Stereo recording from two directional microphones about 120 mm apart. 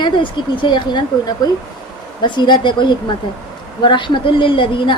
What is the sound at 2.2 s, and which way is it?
Speech, 40° left (ahead or behind).